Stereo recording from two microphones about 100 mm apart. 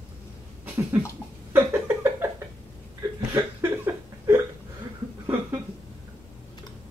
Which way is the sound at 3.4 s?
25° right (ahead or behind).